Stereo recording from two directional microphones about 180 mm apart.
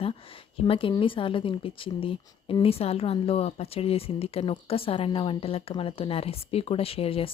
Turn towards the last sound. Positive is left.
turn(degrees=30)  # may be behind; listen again after turning